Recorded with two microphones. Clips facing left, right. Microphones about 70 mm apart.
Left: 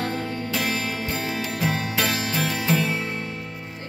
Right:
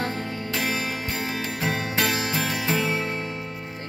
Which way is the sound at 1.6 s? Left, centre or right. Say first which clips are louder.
Even; right.